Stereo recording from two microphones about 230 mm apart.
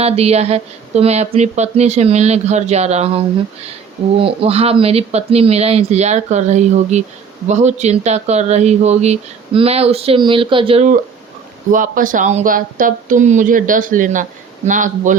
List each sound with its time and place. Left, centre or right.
0.0 s speech: right
11.7 s speech: right